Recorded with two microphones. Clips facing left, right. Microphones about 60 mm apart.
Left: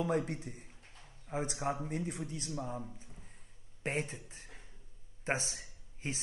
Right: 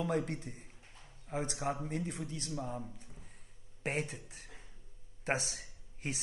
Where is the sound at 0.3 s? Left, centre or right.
Centre.